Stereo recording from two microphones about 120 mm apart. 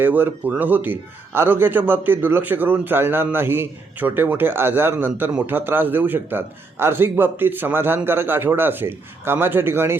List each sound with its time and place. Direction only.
0.0 s a man's voice: 15° right (ahead or behind)